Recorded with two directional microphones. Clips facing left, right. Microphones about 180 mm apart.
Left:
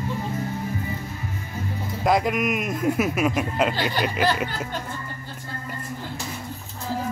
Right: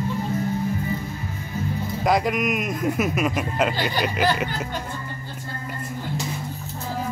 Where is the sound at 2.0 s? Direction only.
Centre (ahead or behind).